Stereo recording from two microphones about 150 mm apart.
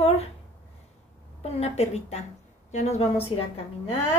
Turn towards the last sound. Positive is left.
turn(degrees=40)  # may be behind; listen again after turning